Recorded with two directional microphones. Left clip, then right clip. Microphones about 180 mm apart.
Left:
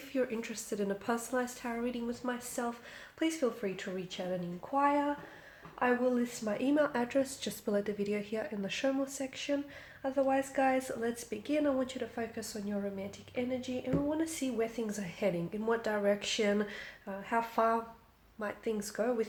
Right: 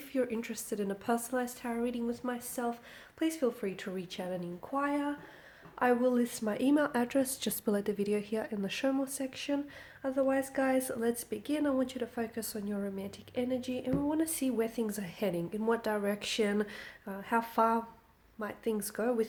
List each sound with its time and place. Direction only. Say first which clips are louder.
0.1 s a woman's voice: right 1 dB; 30° right (ahead or behind)
5.8 s a woman's voice: right 2 dB; 50° right (ahead or behind)